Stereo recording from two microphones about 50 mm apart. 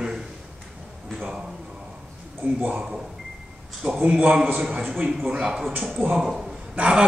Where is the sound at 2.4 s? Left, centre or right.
Right.